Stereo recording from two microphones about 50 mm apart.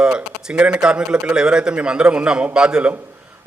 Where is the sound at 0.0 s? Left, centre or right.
Centre.